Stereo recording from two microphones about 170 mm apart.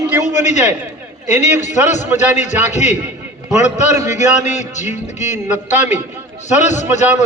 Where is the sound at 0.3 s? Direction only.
45° left (ahead or behind).